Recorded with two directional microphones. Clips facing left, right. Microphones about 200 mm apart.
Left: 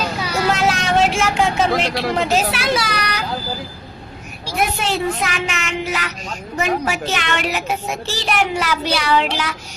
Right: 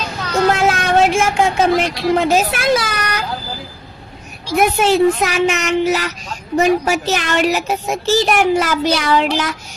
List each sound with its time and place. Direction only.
0.2 s vehicle: 10° left (ahead or behind)
0.5 s vehicle: 55° right (ahead or behind)
2.3 s speech: 50° right (ahead or behind)
4.6 s speech: 45° right (ahead or behind)